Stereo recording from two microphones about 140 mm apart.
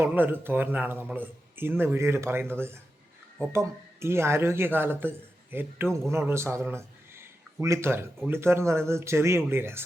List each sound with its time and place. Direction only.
0.0 s speech: 15° right (ahead or behind)